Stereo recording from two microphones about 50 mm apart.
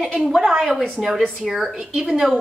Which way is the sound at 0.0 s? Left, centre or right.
Centre.